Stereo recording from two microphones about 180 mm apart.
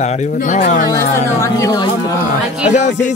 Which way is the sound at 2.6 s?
40° left (ahead or behind).